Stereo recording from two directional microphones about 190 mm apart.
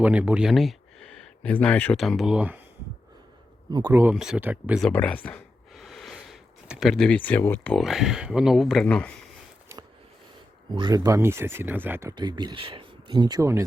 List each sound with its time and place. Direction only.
0.0 s speech: 5° right (ahead or behind)
3.7 s speech: 20° right (ahead or behind)
4.0 s speech: 5° right (ahead or behind)
4.8 s speech: 5° left (ahead or behind)
10.7 s speech: 25° right (ahead or behind)